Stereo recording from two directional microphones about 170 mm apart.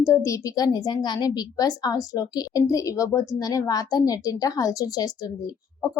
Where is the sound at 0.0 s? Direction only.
15° left (ahead or behind).